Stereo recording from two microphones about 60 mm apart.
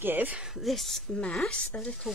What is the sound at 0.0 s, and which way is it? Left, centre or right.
Speech, right.